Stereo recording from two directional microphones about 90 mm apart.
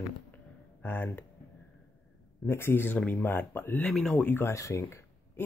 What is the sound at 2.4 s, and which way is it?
Speech, 25° left (ahead or behind).